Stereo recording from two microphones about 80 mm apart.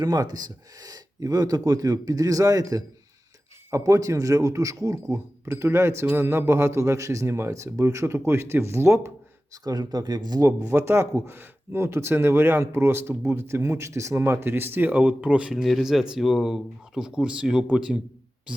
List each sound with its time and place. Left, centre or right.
0.0 s speech: right
9.6 s speech: right; by 17.9 s centre